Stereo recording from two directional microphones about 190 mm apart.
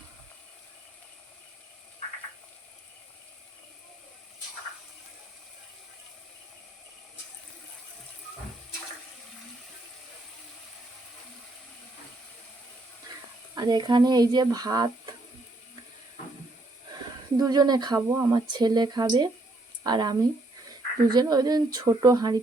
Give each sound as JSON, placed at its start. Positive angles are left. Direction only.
{"t": 13.6, "sound": "speech", "side_deg": -20}
{"t": 17.3, "sound": "speech", "side_deg": -20}